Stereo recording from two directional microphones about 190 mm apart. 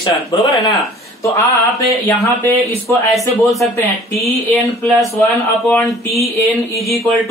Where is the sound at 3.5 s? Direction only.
5° left (ahead or behind).